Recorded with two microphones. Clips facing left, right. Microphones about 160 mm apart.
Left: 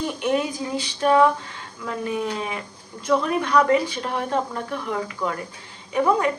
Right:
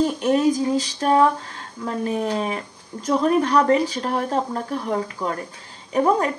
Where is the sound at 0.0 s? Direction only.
40° right (ahead or behind).